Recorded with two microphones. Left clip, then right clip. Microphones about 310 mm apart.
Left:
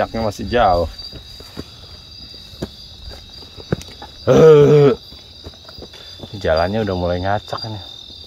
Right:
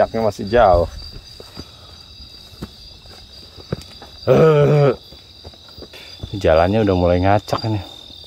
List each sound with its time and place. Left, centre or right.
0.0 s speech: centre
4.2 s a sound: centre
6.4 s speech: right